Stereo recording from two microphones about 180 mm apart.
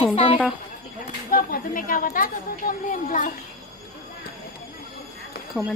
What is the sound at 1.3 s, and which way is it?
A woman's voice, 50° left (ahead or behind).